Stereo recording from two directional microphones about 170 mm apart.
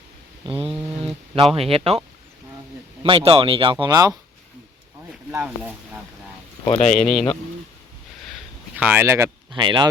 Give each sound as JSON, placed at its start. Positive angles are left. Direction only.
{"t": 0.4, "sound": "speech", "side_deg": -30}
{"t": 3.0, "sound": "speech", "side_deg": -30}
{"t": 5.3, "sound": "speech", "side_deg": -10}
{"t": 6.7, "sound": "speech", "side_deg": 45}
{"t": 6.9, "sound": "speech", "side_deg": 5}
{"t": 8.7, "sound": "speech", "side_deg": -10}
{"t": 9.5, "sound": "speech", "side_deg": -25}